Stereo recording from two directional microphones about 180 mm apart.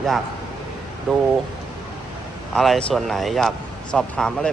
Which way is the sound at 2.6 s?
Centre (ahead or behind).